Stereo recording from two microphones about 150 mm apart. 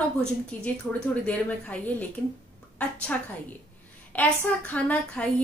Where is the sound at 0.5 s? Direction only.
10° left (ahead or behind).